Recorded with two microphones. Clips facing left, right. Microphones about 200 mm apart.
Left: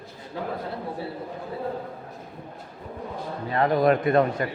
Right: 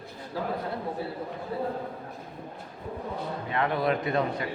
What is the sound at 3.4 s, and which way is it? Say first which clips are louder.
A man's voice: left 7 dB; 40° left (ahead or behind).